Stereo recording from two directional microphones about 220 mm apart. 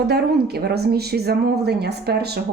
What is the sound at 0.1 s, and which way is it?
Speech, 45° right (ahead or behind).